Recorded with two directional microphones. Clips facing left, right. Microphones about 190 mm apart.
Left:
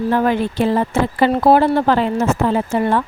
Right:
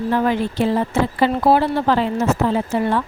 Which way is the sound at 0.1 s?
50° left (ahead or behind).